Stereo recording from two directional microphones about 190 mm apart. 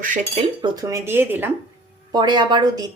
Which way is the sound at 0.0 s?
45° right (ahead or behind).